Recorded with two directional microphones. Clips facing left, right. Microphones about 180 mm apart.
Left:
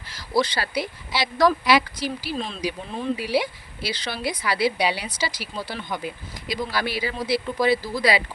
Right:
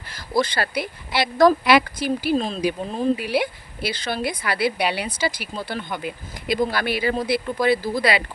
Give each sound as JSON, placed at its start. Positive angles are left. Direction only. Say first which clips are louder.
{"t": 0.1, "sound": "speech", "louder": "right 1 dB", "side_deg": -50}
{"t": 2.3, "sound": "speech", "louder": "right 6 dB", "side_deg": -40}
{"t": 3.2, "sound": "a woman's voice", "louder": "right 1 dB", "side_deg": -55}
{"t": 6.5, "sound": "a woman's voice", "louder": "right 5 dB", "side_deg": -55}